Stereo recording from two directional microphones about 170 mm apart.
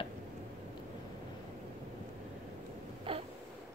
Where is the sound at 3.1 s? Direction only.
30° right (ahead or behind).